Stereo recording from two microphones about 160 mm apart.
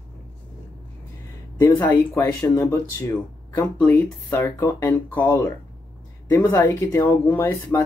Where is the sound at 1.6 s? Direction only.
15° left (ahead or behind).